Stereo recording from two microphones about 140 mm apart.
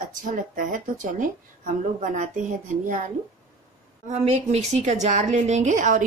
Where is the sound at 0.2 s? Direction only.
70° right (ahead or behind).